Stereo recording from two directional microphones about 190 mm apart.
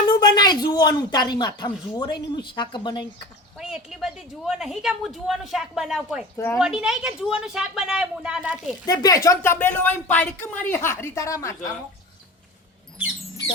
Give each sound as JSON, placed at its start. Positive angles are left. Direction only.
{"t": 0.1, "sound": "speech", "side_deg": 20}
{"t": 3.6, "sound": "a woman's voice", "side_deg": -5}
{"t": 6.3, "sound": "speech", "side_deg": 15}
{"t": 6.6, "sound": "a woman's voice", "side_deg": -5}
{"t": 8.9, "sound": "speech", "side_deg": 20}